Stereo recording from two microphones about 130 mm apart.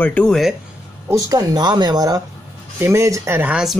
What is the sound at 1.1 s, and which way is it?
Speech, 30° right (ahead or behind).